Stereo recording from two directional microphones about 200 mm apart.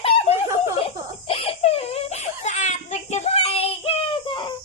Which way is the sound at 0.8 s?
30° left (ahead or behind).